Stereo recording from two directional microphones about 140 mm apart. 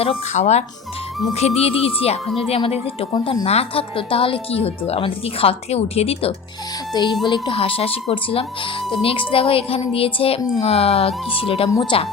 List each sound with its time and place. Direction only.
0.0 s speech: 50° left (ahead or behind)
6.9 s speech: 35° left (ahead or behind)
11.7 s speech: 25° left (ahead or behind)